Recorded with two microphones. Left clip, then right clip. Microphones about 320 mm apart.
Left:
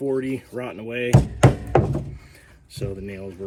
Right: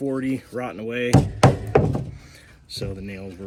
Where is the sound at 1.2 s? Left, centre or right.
Right.